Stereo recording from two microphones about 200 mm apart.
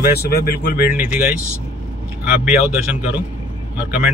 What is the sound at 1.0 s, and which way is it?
Speech, 10° right (ahead or behind).